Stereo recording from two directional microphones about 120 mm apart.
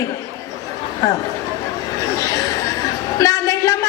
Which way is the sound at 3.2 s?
25° left (ahead or behind).